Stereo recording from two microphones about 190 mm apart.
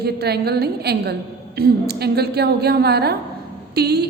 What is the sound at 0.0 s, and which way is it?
A woman's voice, 55° right (ahead or behind).